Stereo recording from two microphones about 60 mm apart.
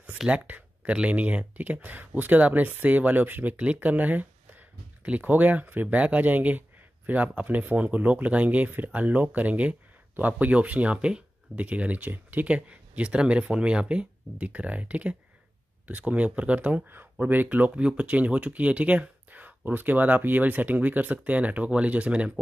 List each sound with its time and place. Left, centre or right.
0.3 s speech: right